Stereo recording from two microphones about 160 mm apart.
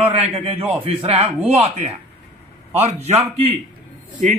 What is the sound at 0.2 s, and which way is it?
A man's voice, 40° right (ahead or behind).